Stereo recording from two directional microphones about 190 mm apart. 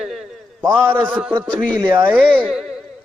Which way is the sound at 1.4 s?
20° right (ahead or behind).